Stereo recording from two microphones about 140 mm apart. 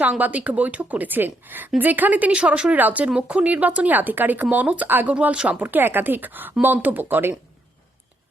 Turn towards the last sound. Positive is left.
turn(degrees=-15)  # may be behind; listen again after turning